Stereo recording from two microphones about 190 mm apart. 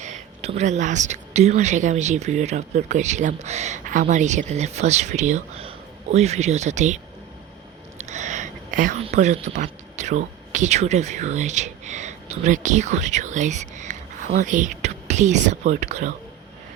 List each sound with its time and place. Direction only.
0.0 s speech: 35° right (ahead or behind)
8.0 s a sound: 40° right (ahead or behind)
9.0 s speech: 40° right (ahead or behind)